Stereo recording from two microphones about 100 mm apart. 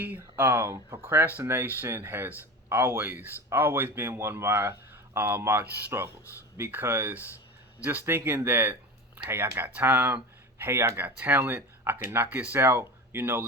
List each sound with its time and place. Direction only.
0.0 s speech: 20° right (ahead or behind)